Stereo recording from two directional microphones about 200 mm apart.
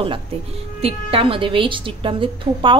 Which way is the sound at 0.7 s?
30° right (ahead or behind).